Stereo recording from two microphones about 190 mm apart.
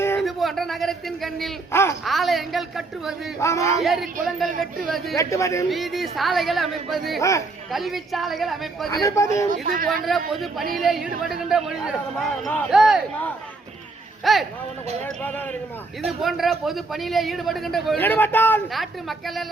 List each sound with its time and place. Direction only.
0.2 s a man's voice: centre (ahead or behind)
1.7 s speech: 15° left (ahead or behind)
2.0 s speech: centre (ahead or behind)
3.4 s speech: 15° left (ahead or behind)
3.8 s speech: centre (ahead or behind)
5.1 s speech: 15° left (ahead or behind)
5.6 s speech: centre (ahead or behind)
7.2 s speech: 15° left (ahead or behind)
7.7 s speech: centre (ahead or behind)
8.9 s speech: 15° left (ahead or behind)
9.5 s speech: 50° right (ahead or behind)
10.1 s speech: centre (ahead or behind)
18.0 s speech: 10° left (ahead or behind)
18.7 s speech: centre (ahead or behind)